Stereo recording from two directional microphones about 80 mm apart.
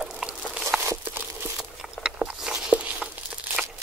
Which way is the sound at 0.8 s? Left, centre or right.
Right.